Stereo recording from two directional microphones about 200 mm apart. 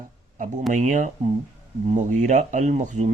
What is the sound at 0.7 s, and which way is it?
A man's voice, 40° right (ahead or behind).